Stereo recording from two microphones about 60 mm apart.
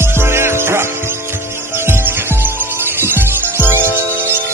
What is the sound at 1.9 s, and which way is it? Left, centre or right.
Music, right.